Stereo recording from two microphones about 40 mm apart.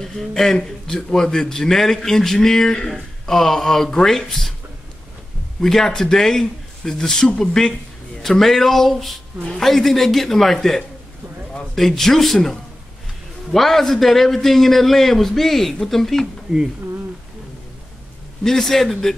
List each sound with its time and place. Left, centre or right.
0.0 s a man's voice: centre
5.6 s a man's voice: centre
16.5 s speech: centre
18.4 s a man's voice: centre